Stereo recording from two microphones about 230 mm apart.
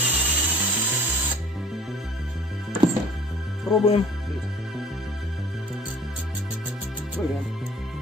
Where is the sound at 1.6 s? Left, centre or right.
Centre.